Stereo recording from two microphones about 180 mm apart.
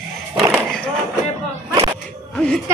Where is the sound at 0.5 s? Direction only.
Centre (ahead or behind).